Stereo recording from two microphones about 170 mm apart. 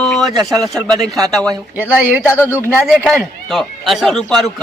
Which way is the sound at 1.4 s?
10° right (ahead or behind).